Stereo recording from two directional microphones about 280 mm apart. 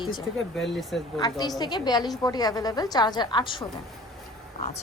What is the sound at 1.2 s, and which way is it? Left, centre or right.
A woman's voice, centre.